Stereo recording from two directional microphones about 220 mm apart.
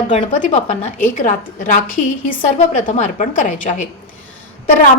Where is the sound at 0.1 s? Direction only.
35° left (ahead or behind).